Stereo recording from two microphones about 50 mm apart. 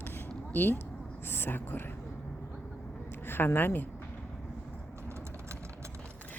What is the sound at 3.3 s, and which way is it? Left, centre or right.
Speech, left.